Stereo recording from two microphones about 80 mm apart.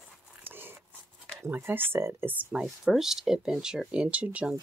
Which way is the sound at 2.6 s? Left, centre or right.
Centre.